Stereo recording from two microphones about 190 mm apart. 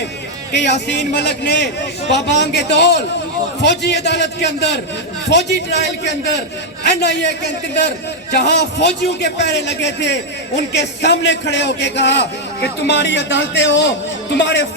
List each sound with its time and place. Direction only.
0.5 s a man's voice: 65° left (ahead or behind)